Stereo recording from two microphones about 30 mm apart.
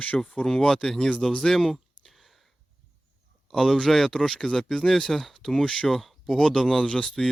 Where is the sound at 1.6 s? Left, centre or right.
Centre.